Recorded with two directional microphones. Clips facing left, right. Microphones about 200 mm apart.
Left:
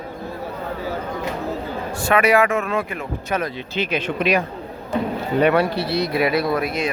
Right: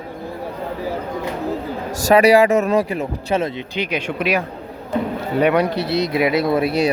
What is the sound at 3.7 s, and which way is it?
Speech, 15° right (ahead or behind).